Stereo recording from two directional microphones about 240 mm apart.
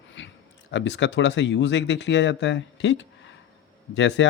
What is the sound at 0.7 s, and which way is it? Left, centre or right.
Speech, left.